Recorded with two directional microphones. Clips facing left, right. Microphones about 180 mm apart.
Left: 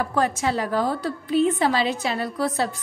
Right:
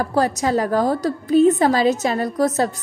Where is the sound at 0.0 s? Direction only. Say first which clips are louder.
Right 3 dB; 35° right (ahead or behind).